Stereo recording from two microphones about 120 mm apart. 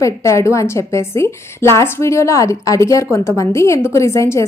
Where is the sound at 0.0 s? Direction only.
25° left (ahead or behind).